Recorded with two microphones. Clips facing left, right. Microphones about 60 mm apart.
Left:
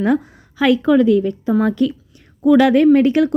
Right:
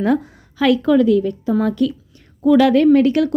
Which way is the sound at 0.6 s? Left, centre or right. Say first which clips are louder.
Left 1 dB; left.